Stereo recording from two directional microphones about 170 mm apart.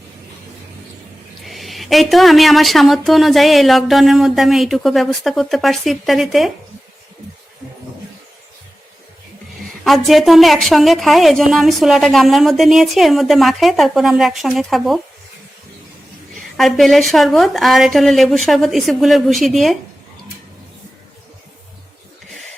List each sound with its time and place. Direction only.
1.4 s a woman's voice: centre (ahead or behind)
9.8 s a woman's voice: centre (ahead or behind)
16.6 s a woman's voice: centre (ahead or behind)